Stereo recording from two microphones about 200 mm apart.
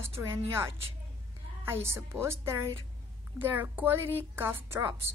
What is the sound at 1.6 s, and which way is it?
Speech, 10° right (ahead or behind).